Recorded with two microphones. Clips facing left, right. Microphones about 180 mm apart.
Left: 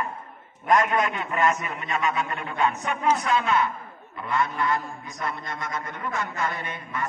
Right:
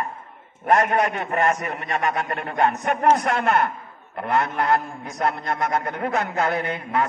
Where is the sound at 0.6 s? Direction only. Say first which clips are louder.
Right 3 dB; 60° right (ahead or behind).